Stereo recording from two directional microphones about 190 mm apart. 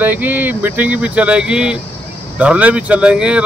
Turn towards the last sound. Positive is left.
turn(degrees=-5)  # may be behind; listen again after turning